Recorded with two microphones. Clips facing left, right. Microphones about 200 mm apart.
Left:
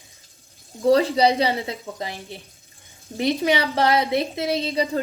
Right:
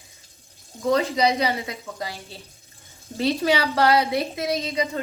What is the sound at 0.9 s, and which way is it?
A woman's voice, 35° left (ahead or behind).